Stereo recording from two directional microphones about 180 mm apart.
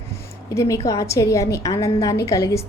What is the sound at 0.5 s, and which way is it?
A woman's voice, 15° left (ahead or behind).